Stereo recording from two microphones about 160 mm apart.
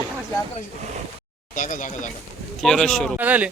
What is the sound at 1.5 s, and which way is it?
Speech, 50° left (ahead or behind).